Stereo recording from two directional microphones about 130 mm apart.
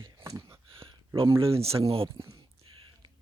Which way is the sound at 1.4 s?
50° right (ahead or behind).